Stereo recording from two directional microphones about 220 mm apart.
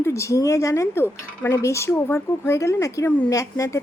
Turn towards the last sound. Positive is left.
turn(degrees=15)  # may be behind; listen again after turning